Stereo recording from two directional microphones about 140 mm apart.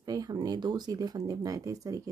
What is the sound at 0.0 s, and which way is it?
Speech, 30° right (ahead or behind).